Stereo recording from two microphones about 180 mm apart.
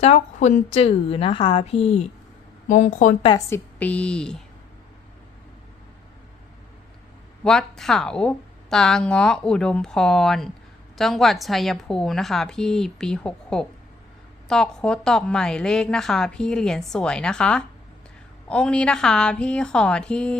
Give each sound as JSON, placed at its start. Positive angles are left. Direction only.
{"t": 0.0, "sound": "a woman's voice", "side_deg": 40}
{"t": 2.6, "sound": "a woman's voice", "side_deg": 45}
{"t": 3.2, "sound": "a woman's voice", "side_deg": 20}
{"t": 3.8, "sound": "a woman's voice", "side_deg": 10}
{"t": 7.4, "sound": "a woman's voice", "side_deg": 5}